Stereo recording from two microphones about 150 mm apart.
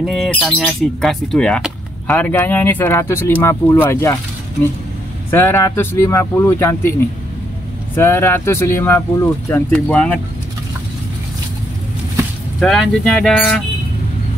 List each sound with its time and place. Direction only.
0.0 s speech: centre (ahead or behind)
5.3 s speech: 15° left (ahead or behind)
7.9 s speech: 15° left (ahead or behind)
12.5 s speech: centre (ahead or behind)